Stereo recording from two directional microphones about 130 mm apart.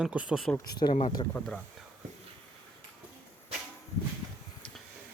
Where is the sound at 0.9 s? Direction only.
45° left (ahead or behind).